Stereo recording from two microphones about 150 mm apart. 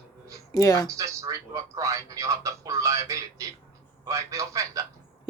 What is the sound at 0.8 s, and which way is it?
A man's voice, 20° right (ahead or behind).